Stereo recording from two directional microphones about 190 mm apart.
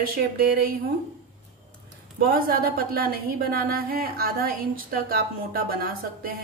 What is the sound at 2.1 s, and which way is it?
A woman's voice, 50° right (ahead or behind).